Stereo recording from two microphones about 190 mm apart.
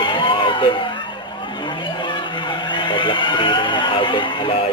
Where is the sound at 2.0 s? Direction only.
25° left (ahead or behind).